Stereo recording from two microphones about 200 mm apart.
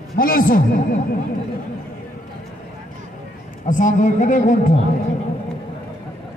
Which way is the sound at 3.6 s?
40° left (ahead or behind).